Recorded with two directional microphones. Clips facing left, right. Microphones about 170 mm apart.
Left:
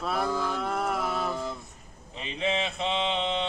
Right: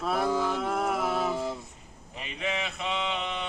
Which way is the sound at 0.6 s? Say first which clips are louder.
Right 1 dB; centre (ahead or behind).